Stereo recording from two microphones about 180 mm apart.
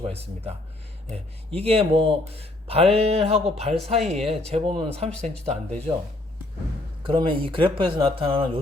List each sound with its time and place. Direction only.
0.0 s speech: 35° right (ahead or behind)
7.1 s speech: 30° right (ahead or behind)